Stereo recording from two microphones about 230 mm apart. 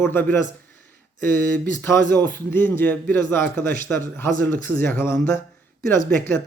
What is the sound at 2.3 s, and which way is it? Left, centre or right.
A man's voice, centre.